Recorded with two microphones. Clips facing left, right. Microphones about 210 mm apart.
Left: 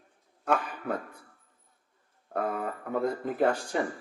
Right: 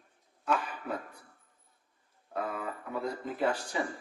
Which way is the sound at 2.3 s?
50° left (ahead or behind).